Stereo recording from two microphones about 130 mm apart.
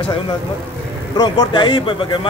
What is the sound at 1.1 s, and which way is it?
Speech, 35° left (ahead or behind).